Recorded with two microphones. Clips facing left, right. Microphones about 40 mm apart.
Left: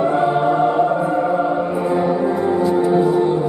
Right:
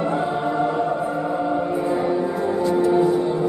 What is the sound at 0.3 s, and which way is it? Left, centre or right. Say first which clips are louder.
Choir: left 6 dB; left.